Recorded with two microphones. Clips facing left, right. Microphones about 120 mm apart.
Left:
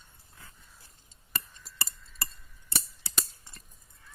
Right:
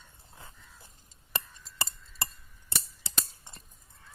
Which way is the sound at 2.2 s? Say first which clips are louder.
Right 3 dB; 25° right (ahead or behind).